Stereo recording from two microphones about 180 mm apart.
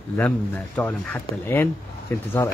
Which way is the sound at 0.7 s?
10° left (ahead or behind).